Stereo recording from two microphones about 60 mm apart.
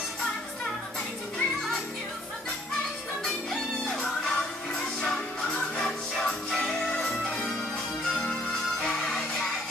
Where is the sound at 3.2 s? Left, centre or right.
Centre.